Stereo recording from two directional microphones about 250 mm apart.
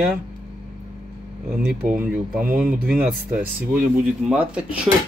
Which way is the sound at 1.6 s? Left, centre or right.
Centre.